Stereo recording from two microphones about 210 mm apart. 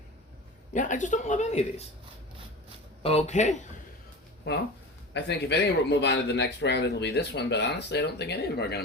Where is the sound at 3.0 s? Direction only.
30° left (ahead or behind).